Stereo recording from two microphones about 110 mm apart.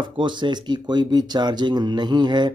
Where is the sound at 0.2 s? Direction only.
45° right (ahead or behind).